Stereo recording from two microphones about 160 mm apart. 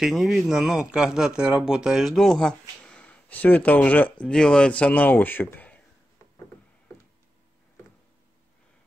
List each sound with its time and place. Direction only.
0.0 s speech: centre (ahead or behind)